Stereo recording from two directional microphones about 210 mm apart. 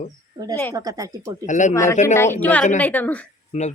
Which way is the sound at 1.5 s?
35° left (ahead or behind).